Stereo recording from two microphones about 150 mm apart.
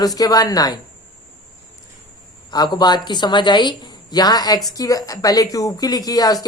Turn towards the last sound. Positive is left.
turn(degrees=25)  # may be behind; listen again after turning